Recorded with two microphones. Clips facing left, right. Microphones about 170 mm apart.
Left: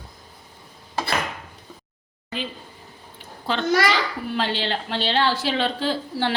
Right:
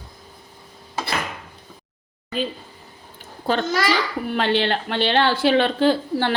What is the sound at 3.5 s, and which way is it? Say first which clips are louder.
Speech: right 4 dB; 45° right (ahead or behind).